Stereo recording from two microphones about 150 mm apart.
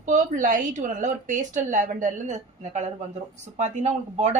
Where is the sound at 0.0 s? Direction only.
60° right (ahead or behind).